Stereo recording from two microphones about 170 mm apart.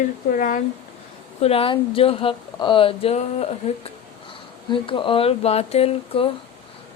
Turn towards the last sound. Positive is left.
turn(degrees=35)  # may be behind; listen again after turning